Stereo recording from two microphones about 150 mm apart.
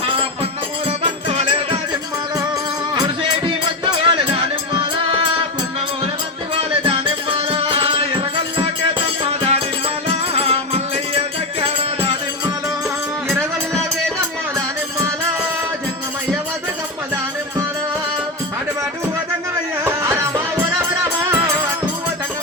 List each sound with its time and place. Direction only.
0.9 s music: 45° right (ahead or behind)
2.9 s music: 30° right (ahead or behind)
6.5 s music: 35° right (ahead or behind)
19.8 s music: 15° right (ahead or behind)